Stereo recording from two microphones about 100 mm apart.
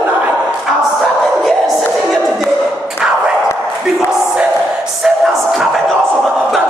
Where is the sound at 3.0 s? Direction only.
10° right (ahead or behind).